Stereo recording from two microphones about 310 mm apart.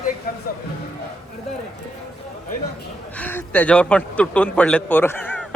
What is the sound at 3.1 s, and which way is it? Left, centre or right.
A man's voice, centre.